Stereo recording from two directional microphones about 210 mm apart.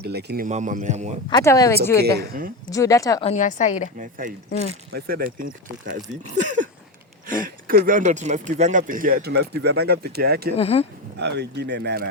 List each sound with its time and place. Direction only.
0.0 s speech: 50° right (ahead or behind); by 1.2 s 35° right (ahead or behind)
1.3 s a woman's voice: 15° left (ahead or behind)
2.0 s speech: 50° right (ahead or behind)
2.6 s a woman's voice: 15° left (ahead or behind)
3.2 s a woman's voice: 35° left (ahead or behind)
3.9 s speech: 40° right (ahead or behind)
10.6 s speech: 30° left (ahead or behind)
11.2 s speech: 55° right (ahead or behind)